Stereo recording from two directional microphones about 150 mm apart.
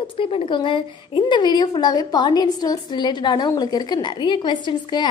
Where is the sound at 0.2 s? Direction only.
35° left (ahead or behind).